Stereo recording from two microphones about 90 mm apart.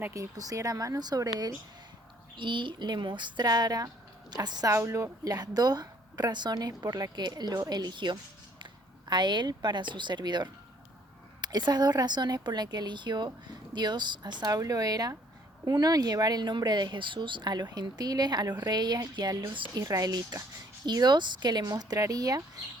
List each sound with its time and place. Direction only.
0.1 s speech: 40° right (ahead or behind)
2.3 s speech: 65° right (ahead or behind); by 4.7 s 45° right (ahead or behind)
4.7 s speech: 35° right (ahead or behind)